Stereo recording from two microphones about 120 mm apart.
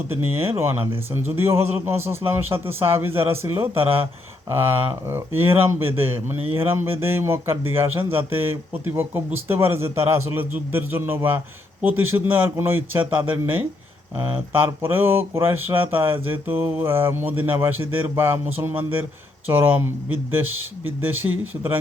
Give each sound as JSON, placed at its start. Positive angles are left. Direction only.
{"t": 0.1, "sound": "a man's voice", "side_deg": -20}
{"t": 3.8, "sound": "speech", "side_deg": -50}
{"t": 4.4, "sound": "a man's voice", "side_deg": -20}
{"t": 21.2, "sound": "a man's voice", "side_deg": -30}